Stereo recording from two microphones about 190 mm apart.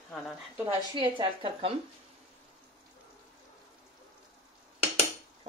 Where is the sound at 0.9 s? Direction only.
25° right (ahead or behind).